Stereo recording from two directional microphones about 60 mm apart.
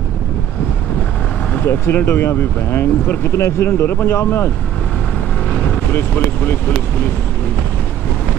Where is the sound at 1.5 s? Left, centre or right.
Left.